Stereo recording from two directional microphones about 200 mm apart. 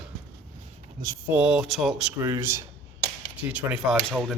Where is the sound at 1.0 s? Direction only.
10° right (ahead or behind).